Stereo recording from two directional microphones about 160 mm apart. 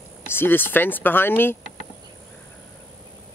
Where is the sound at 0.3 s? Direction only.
15° left (ahead or behind).